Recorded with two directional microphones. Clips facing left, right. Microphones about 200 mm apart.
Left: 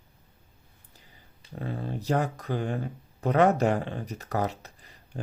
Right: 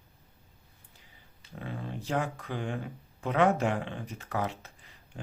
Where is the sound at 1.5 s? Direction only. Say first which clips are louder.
Left 5 dB; 35° left (ahead or behind).